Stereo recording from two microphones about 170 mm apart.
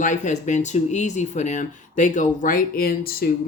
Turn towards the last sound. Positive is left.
turn(degrees=60)  # may be behind; listen again after turning